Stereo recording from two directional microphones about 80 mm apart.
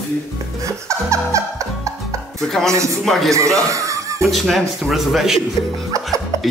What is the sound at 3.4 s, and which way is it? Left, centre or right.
Speech, right.